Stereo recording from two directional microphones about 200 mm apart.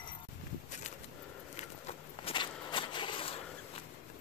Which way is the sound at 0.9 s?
35° left (ahead or behind).